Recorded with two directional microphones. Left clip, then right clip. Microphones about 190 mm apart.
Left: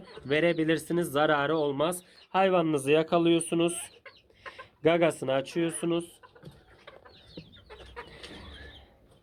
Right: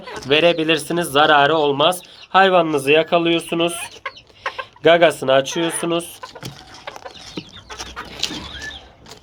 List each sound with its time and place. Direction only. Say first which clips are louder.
0.3 s a man's voice: right 11 dB; 25° left (ahead or behind)
4.0 s chicken: right 18 dB; 30° right (ahead or behind)
4.8 s a man's voice: right 12 dB; 30° left (ahead or behind)